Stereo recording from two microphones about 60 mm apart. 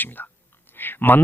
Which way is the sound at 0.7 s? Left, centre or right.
Left.